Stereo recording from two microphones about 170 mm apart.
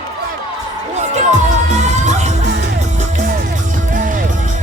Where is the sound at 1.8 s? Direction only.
40° right (ahead or behind).